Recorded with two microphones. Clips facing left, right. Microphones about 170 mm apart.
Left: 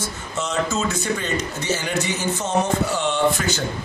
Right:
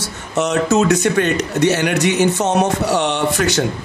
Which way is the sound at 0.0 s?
70° right (ahead or behind).